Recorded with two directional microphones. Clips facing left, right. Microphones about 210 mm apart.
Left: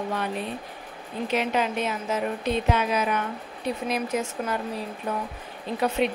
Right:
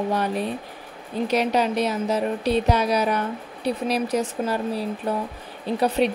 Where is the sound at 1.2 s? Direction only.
40° right (ahead or behind).